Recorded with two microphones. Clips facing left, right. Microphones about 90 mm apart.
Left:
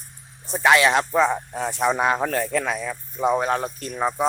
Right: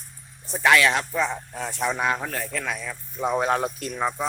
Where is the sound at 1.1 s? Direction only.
40° left (ahead or behind).